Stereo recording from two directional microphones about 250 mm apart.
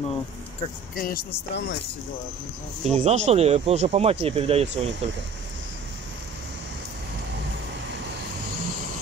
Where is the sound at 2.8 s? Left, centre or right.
Right.